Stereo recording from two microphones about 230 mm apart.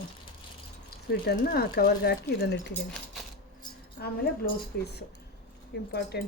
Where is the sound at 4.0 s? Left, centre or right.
Left.